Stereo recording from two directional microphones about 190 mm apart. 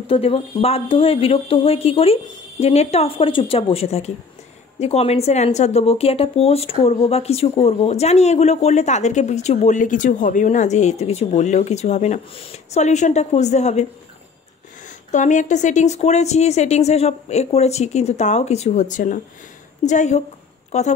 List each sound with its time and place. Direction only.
0.0 s speech: 30° left (ahead or behind)
15.0 s speech: 40° left (ahead or behind)